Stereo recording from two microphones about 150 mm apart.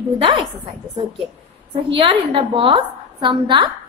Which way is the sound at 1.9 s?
35° right (ahead or behind).